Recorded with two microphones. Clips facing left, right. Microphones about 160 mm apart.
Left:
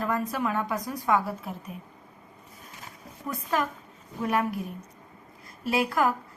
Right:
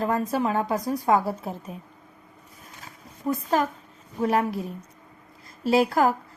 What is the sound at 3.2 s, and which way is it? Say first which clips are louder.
A woman's voice: right 5 dB; 35° right (ahead or behind).